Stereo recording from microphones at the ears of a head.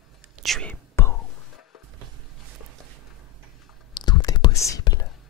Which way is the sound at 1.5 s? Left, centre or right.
Left.